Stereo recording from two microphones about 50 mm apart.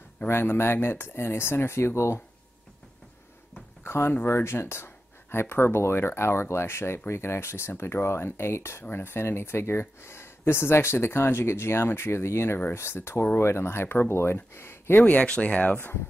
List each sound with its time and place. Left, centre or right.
0.3 s speech: left
3.8 s a sound: left
4.1 s speech: left
15.2 s speech: left